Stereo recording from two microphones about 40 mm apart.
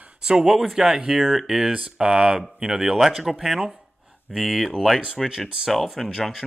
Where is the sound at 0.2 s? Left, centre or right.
Centre.